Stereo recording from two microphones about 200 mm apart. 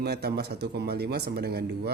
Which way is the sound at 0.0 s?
55° right (ahead or behind).